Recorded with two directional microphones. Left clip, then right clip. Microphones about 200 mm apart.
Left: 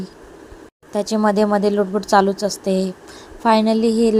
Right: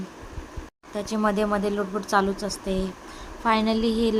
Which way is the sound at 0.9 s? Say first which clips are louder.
Left 7 dB; 25° left (ahead or behind).